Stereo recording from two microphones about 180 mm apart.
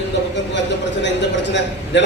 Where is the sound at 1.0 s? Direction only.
80° left.